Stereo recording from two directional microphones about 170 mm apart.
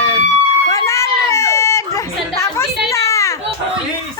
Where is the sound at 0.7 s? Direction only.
20° left (ahead or behind).